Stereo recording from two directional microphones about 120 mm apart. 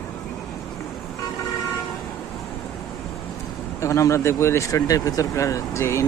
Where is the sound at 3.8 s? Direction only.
25° left (ahead or behind).